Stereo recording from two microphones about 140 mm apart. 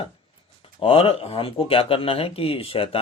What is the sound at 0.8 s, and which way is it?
Speech, 40° left (ahead or behind).